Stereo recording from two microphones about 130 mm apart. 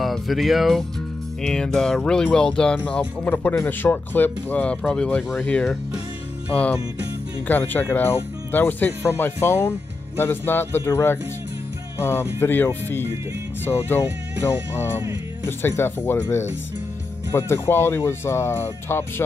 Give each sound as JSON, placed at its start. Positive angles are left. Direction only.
{"t": 0.0, "sound": "speech", "side_deg": 0}
{"t": 15.4, "sound": "speech", "side_deg": 15}